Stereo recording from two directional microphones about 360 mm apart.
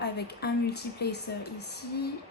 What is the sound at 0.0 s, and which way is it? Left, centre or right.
A woman's voice, left.